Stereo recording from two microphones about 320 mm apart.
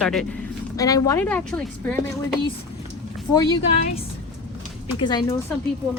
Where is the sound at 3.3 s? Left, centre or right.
Centre.